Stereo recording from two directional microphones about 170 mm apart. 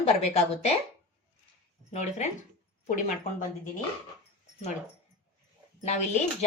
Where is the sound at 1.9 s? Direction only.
45° left (ahead or behind).